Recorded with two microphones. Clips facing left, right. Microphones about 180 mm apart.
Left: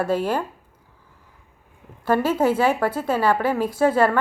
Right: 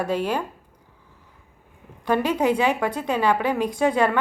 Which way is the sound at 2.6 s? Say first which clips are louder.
Left 2 dB; 10° left (ahead or behind).